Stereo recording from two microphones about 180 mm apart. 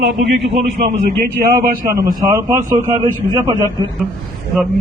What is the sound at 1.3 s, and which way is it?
Speech, 60° right (ahead or behind).